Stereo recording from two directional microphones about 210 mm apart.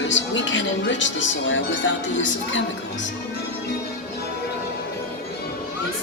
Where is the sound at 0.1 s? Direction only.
60° left (ahead or behind).